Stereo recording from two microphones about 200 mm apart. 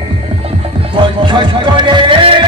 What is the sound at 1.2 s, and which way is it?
Music, 25° right (ahead or behind).